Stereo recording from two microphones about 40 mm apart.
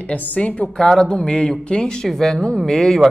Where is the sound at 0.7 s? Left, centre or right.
Centre.